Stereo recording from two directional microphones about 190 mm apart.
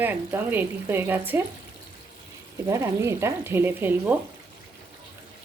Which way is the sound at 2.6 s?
15° right (ahead or behind).